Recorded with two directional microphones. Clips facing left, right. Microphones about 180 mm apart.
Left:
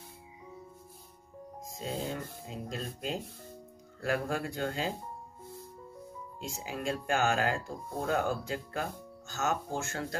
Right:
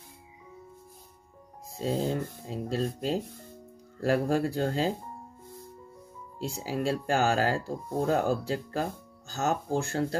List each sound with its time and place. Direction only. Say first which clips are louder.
1.8 s speech: right 7 dB; 35° right (ahead or behind)
6.4 s speech: right 6 dB; 35° right (ahead or behind)